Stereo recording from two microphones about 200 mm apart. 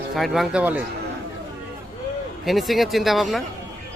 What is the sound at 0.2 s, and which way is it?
Speech, 5° right (ahead or behind).